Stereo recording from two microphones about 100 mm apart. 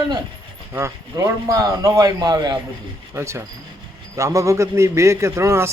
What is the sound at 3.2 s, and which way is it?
A man's voice, 25° right (ahead or behind).